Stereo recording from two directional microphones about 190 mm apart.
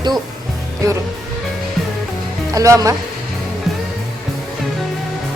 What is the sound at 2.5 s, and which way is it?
Speech, 15° right (ahead or behind).